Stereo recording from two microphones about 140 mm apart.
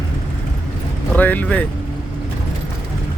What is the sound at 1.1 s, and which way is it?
Speech, 10° left (ahead or behind).